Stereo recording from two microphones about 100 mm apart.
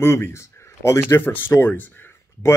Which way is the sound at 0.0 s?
25° left (ahead or behind).